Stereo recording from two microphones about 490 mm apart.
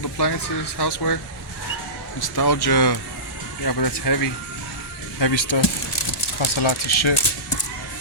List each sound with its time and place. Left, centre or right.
0.2 s speech: left
2.2 s speech: left
5.2 s speech: left